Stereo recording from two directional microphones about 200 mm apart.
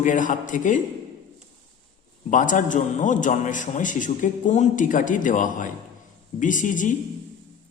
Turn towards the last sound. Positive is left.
turn(degrees=40)  # may be behind; listen again after turning